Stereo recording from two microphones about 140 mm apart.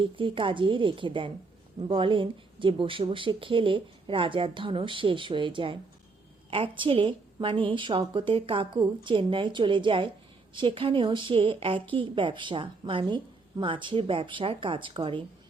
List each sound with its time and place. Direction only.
0.0 s a woman's voice: 40° right (ahead or behind)